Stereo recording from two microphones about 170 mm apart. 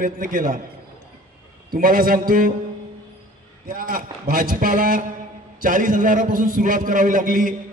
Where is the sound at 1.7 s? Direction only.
55° right (ahead or behind).